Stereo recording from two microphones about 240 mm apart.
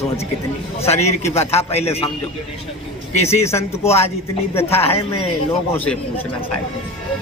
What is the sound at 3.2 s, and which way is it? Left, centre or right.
Speech, centre.